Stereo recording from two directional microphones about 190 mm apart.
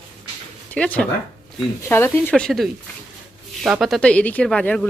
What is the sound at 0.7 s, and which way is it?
Speech, 5° left (ahead or behind).